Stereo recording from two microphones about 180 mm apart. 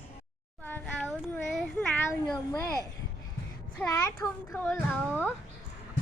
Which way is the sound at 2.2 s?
20° left (ahead or behind).